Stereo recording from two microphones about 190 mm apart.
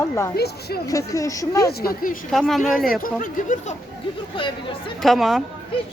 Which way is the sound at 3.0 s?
45° left (ahead or behind).